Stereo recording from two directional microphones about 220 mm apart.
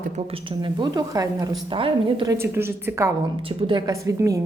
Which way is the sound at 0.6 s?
20° right (ahead or behind).